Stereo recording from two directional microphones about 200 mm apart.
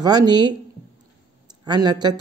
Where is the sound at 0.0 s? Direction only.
20° right (ahead or behind).